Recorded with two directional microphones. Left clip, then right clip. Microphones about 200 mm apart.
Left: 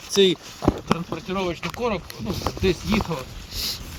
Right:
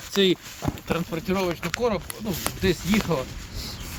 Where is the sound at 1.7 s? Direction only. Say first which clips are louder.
Right 1 dB; centre (ahead or behind).